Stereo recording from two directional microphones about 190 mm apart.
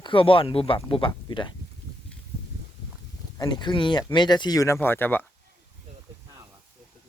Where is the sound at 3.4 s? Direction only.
25° left (ahead or behind).